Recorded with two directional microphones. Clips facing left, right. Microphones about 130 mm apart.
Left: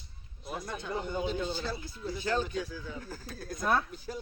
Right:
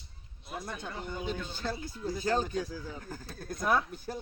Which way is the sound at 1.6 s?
50° right (ahead or behind).